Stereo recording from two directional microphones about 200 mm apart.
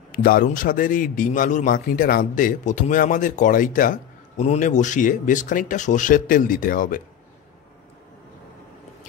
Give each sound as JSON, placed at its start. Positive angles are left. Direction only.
{"t": 0.1, "sound": "a man's voice", "side_deg": 45}